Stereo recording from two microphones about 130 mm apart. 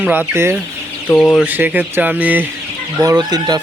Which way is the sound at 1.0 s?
10° left (ahead or behind).